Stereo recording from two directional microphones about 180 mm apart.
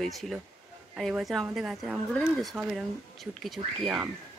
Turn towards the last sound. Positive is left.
turn(degrees=0)  # may be behind; listen again after turning